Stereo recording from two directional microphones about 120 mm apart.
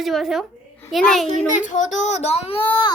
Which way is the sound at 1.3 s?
90° left.